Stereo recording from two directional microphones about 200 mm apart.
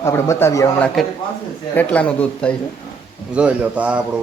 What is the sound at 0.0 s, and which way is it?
A man's voice, 15° left (ahead or behind).